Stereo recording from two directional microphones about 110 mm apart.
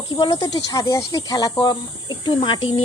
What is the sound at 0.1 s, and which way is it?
Speech, 40° left (ahead or behind).